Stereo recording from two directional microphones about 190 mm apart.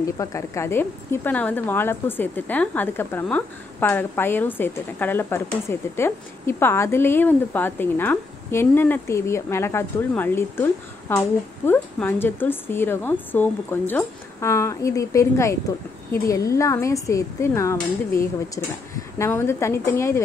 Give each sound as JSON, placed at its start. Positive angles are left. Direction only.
{"t": 0.2, "sound": "speech", "side_deg": 15}